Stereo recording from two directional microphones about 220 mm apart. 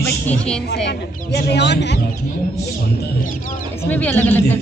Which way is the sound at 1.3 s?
50° left (ahead or behind).